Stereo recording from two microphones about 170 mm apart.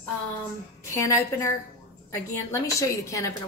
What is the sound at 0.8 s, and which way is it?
A woman's voice, 15° left (ahead or behind).